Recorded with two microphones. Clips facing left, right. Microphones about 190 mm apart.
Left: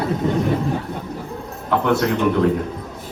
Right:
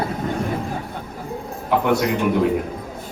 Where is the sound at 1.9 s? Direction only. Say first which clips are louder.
Left 2 dB; 10° right (ahead or behind).